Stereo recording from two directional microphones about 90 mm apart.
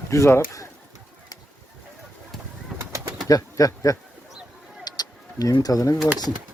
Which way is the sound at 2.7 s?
30° right (ahead or behind).